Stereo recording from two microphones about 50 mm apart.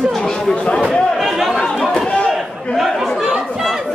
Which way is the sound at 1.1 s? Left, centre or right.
Centre.